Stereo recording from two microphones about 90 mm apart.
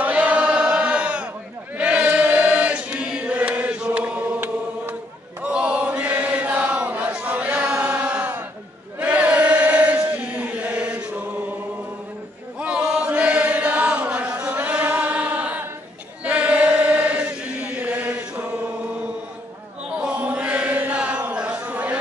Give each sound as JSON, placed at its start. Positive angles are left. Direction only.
{"t": 0.0, "sound": "chant", "side_deg": -15}
{"t": 12.5, "sound": "chant", "side_deg": -10}
{"t": 19.9, "sound": "chant", "side_deg": -10}
{"t": 21.6, "sound": "a sound", "side_deg": -15}